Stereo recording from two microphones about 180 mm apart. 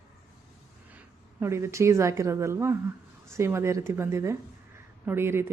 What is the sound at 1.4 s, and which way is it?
A woman's voice, 15° right (ahead or behind).